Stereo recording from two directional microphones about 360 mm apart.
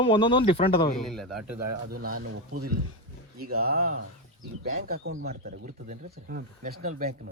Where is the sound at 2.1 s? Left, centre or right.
Right.